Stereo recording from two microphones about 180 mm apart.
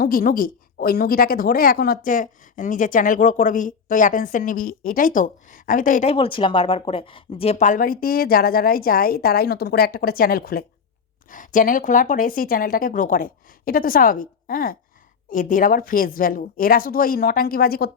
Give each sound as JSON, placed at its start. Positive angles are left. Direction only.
{"t": 0.0, "sound": "speech", "side_deg": 55}
{"t": 6.1, "sound": "speech", "side_deg": 30}